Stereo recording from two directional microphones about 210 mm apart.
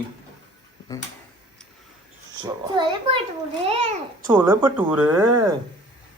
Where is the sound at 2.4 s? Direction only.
20° right (ahead or behind).